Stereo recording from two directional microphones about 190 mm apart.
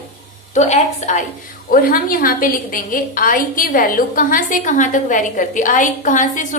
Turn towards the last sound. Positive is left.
turn(degrees=40)  # may be behind; listen again after turning